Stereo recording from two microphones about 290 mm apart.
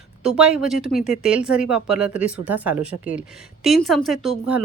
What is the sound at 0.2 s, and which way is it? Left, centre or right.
Speech, centre.